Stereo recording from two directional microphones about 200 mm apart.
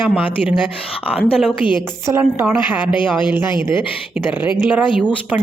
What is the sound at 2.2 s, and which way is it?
Speech, 5° right (ahead or behind).